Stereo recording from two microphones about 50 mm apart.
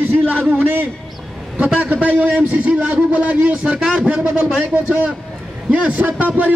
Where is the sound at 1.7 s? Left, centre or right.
Right.